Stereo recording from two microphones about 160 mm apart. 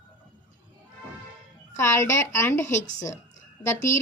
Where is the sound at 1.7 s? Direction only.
15° left (ahead or behind).